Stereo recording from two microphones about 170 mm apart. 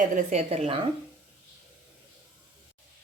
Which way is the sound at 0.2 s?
40° right (ahead or behind).